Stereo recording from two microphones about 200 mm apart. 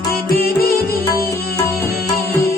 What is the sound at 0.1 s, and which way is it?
Music, 50° left (ahead or behind).